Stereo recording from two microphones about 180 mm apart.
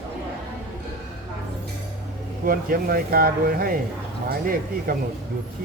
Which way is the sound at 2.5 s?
55° right (ahead or behind).